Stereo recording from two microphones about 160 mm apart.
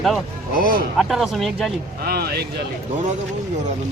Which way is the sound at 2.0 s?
75° right (ahead or behind).